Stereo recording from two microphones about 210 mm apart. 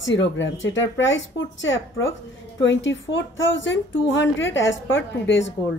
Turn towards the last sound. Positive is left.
turn(degrees=60)  # may be behind; listen again after turning